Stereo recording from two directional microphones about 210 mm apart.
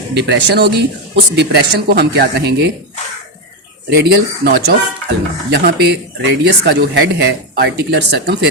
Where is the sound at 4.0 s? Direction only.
50° right (ahead or behind).